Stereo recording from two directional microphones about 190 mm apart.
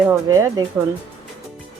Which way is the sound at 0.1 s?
15° right (ahead or behind).